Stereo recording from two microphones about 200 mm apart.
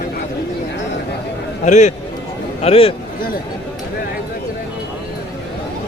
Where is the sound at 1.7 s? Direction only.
35° left (ahead or behind).